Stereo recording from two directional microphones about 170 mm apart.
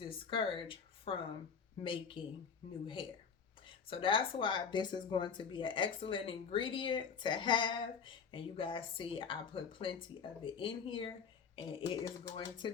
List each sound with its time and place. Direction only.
0.0 s speech: 30° left (ahead or behind)